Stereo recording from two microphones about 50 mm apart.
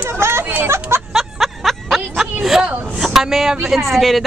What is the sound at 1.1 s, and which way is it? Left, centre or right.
Snicker, centre.